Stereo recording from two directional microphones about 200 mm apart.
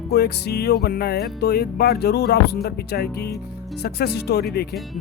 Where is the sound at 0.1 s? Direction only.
50° left (ahead or behind).